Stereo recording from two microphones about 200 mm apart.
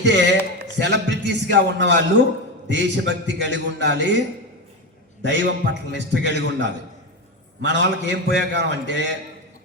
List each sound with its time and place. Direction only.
0.0 s a man's voice: 60° right (ahead or behind)
5.2 s a man's voice: 60° right (ahead or behind)